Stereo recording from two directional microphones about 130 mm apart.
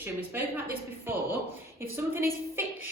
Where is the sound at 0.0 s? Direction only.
15° right (ahead or behind).